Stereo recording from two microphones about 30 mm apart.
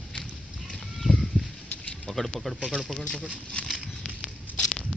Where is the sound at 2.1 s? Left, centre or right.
Left.